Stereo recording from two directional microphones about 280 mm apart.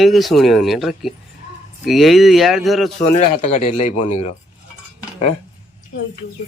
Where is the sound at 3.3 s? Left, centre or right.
Left.